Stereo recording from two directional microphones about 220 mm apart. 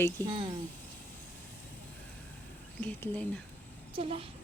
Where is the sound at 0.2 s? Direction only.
10° left (ahead or behind).